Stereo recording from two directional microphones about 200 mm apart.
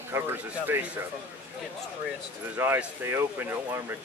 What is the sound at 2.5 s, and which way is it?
Speech, 10° right (ahead or behind).